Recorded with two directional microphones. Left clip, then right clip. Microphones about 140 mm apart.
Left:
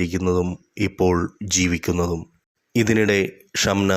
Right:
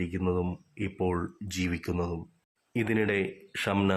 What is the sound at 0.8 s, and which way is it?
Speech, 30° left (ahead or behind).